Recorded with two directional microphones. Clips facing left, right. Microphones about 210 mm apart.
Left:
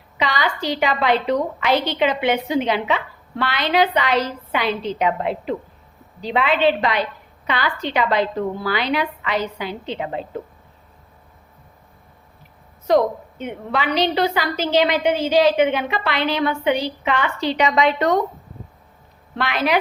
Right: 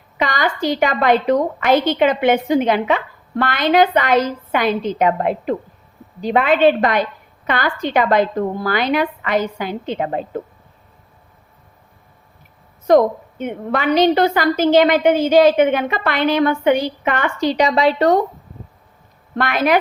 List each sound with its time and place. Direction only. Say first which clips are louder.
0.2 s a woman's voice: right 3 dB; 50° right (ahead or behind)
12.9 s a woman's voice: right 4 dB; 50° right (ahead or behind); by 18.2 s 35° right (ahead or behind)
19.4 s a woman's voice: right 4 dB; 50° right (ahead or behind)